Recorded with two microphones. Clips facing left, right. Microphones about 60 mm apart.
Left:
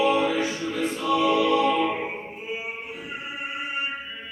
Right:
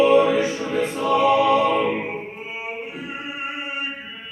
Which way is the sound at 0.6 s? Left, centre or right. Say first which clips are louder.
Right 4 dB; right.